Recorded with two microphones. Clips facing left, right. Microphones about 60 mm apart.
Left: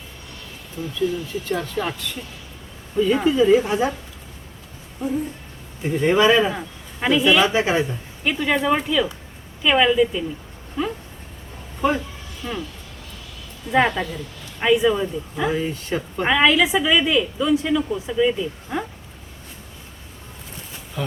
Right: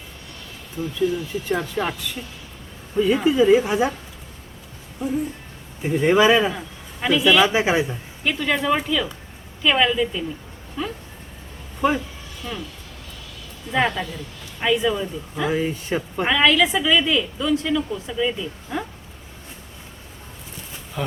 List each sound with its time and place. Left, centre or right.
0.8 s speech: right
1.5 s speech: centre
4.9 s a sound: centre
5.8 s speech: centre
6.5 s a man's voice: centre
7.4 s speech: centre
8.2 s a woman's voice: centre
12.4 s a woman's voice: centre
13.7 s a woman's voice: centre
15.5 s speech: centre
16.3 s a woman's voice: centre